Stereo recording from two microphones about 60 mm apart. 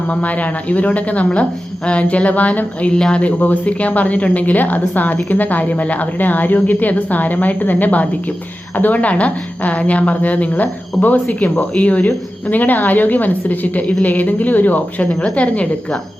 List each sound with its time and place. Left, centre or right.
0.1 s a woman's voice: left